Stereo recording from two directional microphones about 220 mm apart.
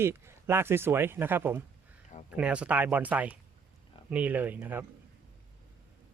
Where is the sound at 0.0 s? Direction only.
10° right (ahead or behind).